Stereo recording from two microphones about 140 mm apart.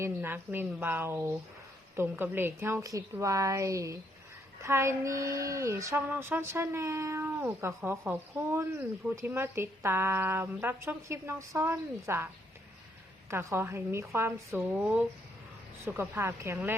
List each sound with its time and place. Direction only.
0.0 s speech: 15° right (ahead or behind)
13.3 s speech: 20° right (ahead or behind)
15.8 s speech: 15° right (ahead or behind)